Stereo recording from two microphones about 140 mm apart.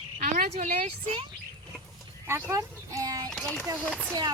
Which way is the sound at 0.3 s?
85° right.